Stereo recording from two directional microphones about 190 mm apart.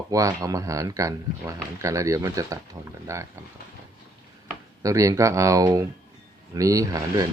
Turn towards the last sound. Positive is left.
turn(degrees=-15)  # may be behind; listen again after turning